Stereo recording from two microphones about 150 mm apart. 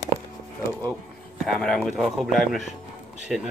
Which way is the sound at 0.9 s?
Centre (ahead or behind).